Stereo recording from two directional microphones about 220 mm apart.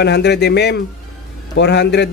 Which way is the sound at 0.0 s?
50° left (ahead or behind).